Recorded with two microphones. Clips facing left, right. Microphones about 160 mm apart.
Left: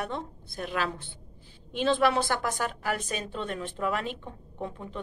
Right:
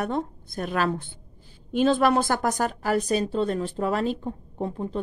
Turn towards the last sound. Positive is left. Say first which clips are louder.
# right 7 dB
turn(degrees=-35)  # may be behind; listen again after turning